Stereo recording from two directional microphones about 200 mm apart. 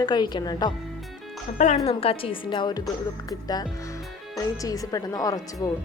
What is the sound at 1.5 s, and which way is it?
A woman's voice, 35° left (ahead or behind).